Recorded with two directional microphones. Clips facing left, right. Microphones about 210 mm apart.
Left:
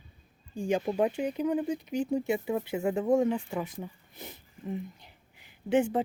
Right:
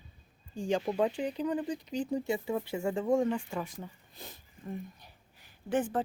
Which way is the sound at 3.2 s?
5° left (ahead or behind).